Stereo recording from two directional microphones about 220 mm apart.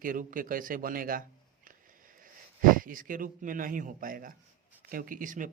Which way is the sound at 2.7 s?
40° right (ahead or behind).